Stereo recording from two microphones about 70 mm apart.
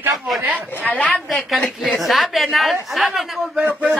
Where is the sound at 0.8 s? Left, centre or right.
Left.